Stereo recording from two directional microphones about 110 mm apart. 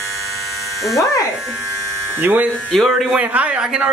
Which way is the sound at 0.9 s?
30° left (ahead or behind).